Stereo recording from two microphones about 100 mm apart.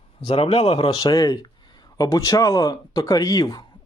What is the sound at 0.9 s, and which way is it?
Speech, 40° left (ahead or behind).